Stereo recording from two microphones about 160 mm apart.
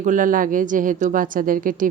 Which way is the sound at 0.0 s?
55° right (ahead or behind).